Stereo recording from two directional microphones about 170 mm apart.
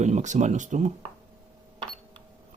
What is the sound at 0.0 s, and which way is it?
Speech, 45° right (ahead or behind).